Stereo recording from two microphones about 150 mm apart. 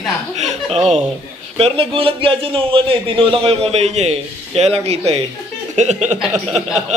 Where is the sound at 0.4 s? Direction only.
45° right (ahead or behind).